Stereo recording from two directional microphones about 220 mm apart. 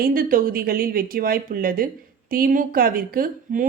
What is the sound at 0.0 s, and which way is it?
A woman's voice, 40° right (ahead or behind).